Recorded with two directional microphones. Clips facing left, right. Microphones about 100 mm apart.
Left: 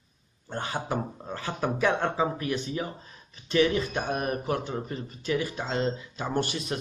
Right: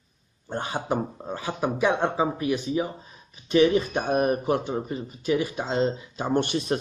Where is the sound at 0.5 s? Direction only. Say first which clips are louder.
Right 3 dB; 15° right (ahead or behind).